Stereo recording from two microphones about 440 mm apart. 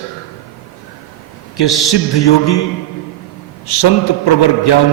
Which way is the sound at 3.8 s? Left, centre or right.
Left.